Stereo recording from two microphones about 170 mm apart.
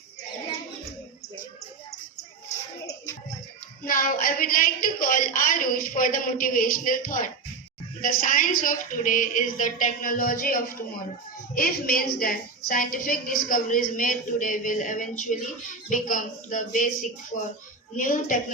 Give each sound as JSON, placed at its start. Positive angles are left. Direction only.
{"t": 3.8, "sound": "a woman's voice", "side_deg": 55}